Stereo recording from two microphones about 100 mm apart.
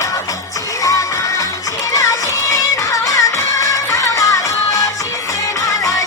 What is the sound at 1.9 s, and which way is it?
Music, 30° left (ahead or behind).